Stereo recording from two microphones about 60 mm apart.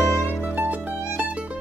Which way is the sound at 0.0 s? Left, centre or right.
Left.